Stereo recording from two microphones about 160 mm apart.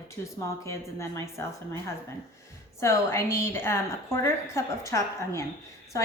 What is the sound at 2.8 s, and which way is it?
A woman's voice, 15° left (ahead or behind).